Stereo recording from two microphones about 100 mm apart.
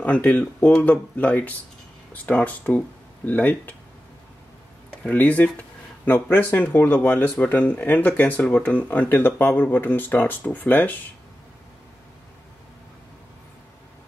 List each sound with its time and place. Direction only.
0.0 s speech: 15° left (ahead or behind)
5.0 s speech: 15° left (ahead or behind)